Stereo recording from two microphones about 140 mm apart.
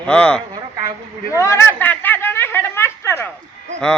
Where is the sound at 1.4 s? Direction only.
20° left (ahead or behind).